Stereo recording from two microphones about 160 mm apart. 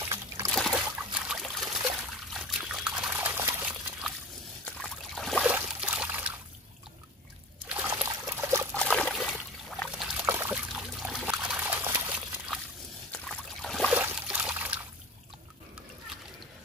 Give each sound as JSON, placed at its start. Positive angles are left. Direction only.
{"t": 0.0, "sound": "a sound", "side_deg": -15}
{"t": 0.5, "sound": "a sound", "side_deg": 0}
{"t": 1.1, "sound": "trickle", "side_deg": -5}
{"t": 4.6, "sound": "a sound", "side_deg": 0}
{"t": 5.5, "sound": "trickle", "side_deg": -10}
{"t": 7.6, "sound": "trickle", "side_deg": -10}
{"t": 8.7, "sound": "trickle", "side_deg": 5}
{"t": 13.1, "sound": "boat", "side_deg": 0}
{"t": 13.9, "sound": "trickle", "side_deg": -10}